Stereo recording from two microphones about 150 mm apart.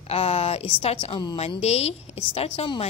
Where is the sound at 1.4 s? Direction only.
45° left (ahead or behind).